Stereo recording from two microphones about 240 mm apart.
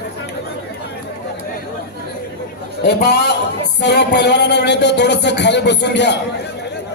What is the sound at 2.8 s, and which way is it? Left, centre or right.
A man's voice, left.